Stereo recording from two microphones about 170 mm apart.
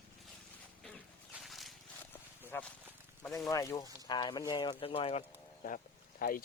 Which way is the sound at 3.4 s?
20° left (ahead or behind).